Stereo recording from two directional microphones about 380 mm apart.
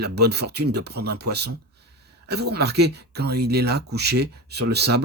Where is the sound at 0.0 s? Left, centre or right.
Right.